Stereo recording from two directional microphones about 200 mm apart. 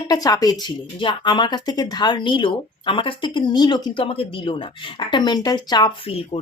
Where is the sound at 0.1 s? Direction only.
20° left (ahead or behind).